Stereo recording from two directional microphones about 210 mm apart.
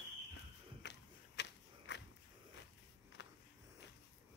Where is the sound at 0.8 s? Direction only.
55° left (ahead or behind).